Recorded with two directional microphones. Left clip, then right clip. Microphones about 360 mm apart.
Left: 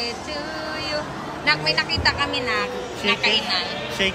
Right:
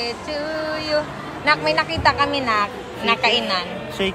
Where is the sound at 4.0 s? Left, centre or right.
Right.